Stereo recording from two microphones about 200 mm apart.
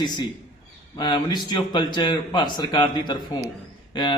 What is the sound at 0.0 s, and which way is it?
A man's voice, 20° left (ahead or behind).